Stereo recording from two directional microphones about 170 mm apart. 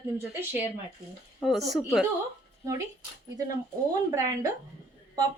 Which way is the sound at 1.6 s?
Centre (ahead or behind).